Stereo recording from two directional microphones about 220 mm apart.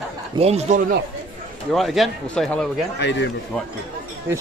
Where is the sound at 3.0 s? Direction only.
55° left (ahead or behind).